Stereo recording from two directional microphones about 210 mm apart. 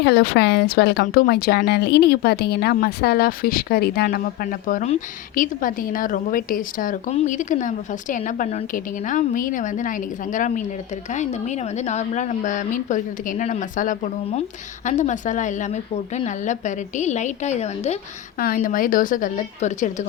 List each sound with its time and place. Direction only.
0.0 s speech: 50° left (ahead or behind); by 17.9 s 30° left (ahead or behind)
18.3 s speech: 40° left (ahead or behind)